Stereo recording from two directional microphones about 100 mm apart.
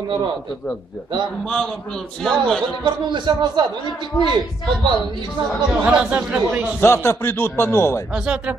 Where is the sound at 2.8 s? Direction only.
55° right (ahead or behind).